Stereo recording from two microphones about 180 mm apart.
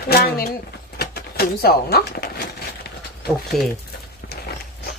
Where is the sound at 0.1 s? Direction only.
60° left (ahead or behind).